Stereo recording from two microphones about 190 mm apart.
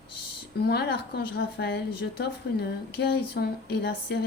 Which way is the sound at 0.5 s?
55° left (ahead or behind).